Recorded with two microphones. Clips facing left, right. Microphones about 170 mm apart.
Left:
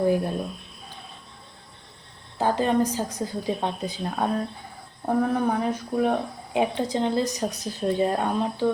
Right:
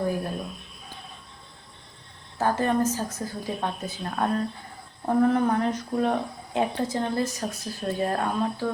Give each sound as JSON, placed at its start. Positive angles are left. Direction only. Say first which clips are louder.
{"t": 2.4, "sound": "speech", "louder": "left 1 dB", "side_deg": 15}